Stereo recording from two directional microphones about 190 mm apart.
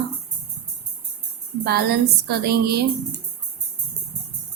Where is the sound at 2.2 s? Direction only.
55° right (ahead or behind).